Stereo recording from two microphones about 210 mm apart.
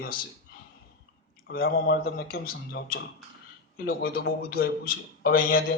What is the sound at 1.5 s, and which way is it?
A man's voice, 45° left (ahead or behind).